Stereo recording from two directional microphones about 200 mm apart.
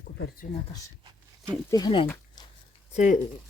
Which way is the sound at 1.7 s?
20° left (ahead or behind).